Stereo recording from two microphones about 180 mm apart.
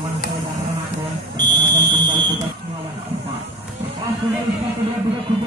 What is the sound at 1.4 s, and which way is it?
Fire alarm, 25° right (ahead or behind).